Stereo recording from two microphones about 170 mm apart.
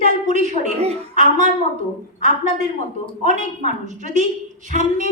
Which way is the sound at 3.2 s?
45° right (ahead or behind).